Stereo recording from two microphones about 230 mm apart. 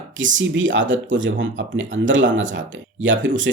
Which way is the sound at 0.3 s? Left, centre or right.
Right.